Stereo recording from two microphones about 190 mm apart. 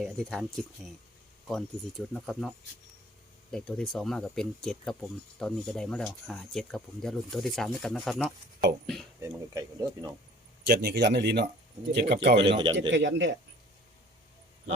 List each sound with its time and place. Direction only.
0.0 s speech: centre (ahead or behind)
3.5 s speech: 5° left (ahead or behind)
9.2 s speech: 15° right (ahead or behind)
10.7 s speech: 55° right (ahead or behind)
12.3 s a man's voice: 25° right (ahead or behind)
12.9 s speech: 75° right (ahead or behind)